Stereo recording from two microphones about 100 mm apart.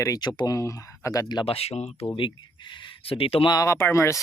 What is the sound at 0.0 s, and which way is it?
Speech, 40° left (ahead or behind).